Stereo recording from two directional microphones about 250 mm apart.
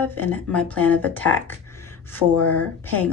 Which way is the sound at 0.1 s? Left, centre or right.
Centre.